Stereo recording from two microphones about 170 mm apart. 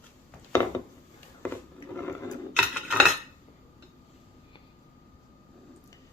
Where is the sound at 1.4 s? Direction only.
10° left (ahead or behind).